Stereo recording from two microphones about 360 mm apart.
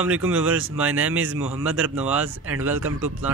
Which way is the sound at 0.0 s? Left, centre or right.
Centre.